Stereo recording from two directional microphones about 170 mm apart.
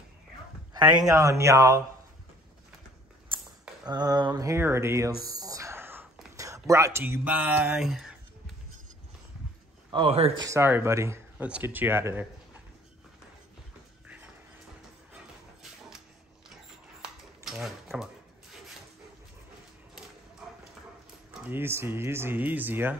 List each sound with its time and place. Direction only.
0.7 s speech: 25° right (ahead or behind)
3.8 s speech: 25° right (ahead or behind)
5.4 s a sound: 20° right (ahead or behind)
6.3 s speech: 20° right (ahead or behind); by 8.2 s centre (ahead or behind)
9.8 s a man's voice: 30° right (ahead or behind)
10.4 s speech: 15° right (ahead or behind)
17.5 s a sound: centre (ahead or behind)
21.3 s speech: 10° right (ahead or behind)